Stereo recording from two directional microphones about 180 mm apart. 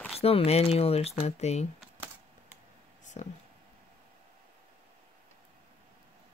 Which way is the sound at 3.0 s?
40° left (ahead or behind).